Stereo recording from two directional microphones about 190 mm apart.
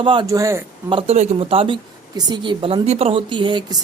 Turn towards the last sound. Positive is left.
turn(degrees=-25)  # may be behind; listen again after turning